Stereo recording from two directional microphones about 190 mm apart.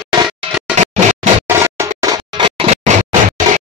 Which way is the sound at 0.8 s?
40° right (ahead or behind).